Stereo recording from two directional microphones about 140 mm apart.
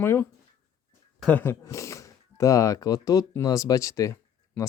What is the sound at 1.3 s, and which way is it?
Speech, 10° left (ahead or behind).